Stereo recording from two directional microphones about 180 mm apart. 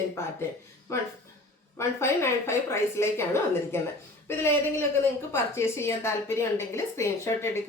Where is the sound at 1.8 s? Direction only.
15° left (ahead or behind).